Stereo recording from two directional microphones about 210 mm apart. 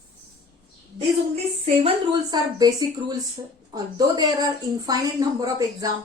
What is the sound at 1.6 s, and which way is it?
A woman's voice, 30° right (ahead or behind).